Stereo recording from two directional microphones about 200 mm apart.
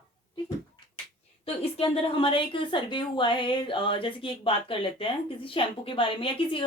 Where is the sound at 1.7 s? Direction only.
25° left (ahead or behind).